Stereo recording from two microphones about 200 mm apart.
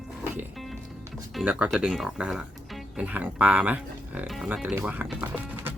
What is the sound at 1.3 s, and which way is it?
Speech, 5° right (ahead or behind).